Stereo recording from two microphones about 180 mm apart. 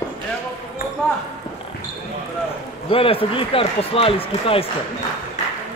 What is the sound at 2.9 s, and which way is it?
Speech, 30° left (ahead or behind).